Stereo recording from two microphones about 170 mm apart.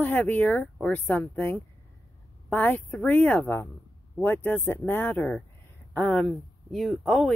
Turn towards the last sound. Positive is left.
turn(degrees=0)  # may be behind; listen again after turning